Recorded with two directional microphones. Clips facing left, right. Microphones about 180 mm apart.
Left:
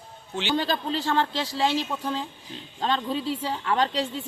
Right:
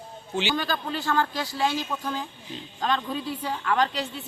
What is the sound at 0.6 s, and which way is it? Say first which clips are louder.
A woman's voice: left 2 dB; 30° left (ahead or behind).